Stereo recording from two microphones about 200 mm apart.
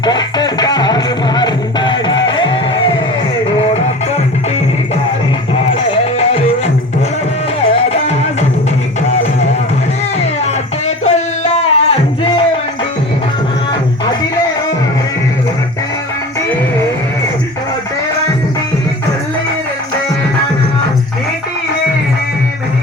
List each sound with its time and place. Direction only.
0.0 s music: 20° left (ahead or behind)
7.7 s music: 30° left (ahead or behind)
10.2 s music: 35° left (ahead or behind)